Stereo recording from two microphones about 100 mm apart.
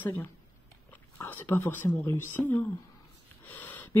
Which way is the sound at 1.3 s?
20° left (ahead or behind).